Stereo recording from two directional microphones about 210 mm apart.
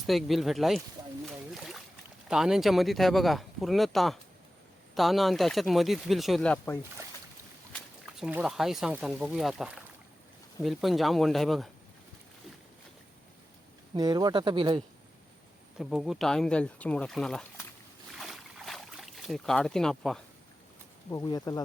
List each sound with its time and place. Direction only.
0.0 s speech: centre (ahead or behind)
1.5 s boat: centre (ahead or behind)
2.3 s speech: centre (ahead or behind)
13.9 s speech: 20° right (ahead or behind)
15.8 s speech: centre (ahead or behind)
18.1 s boat: centre (ahead or behind)
21.1 s speech: 15° left (ahead or behind)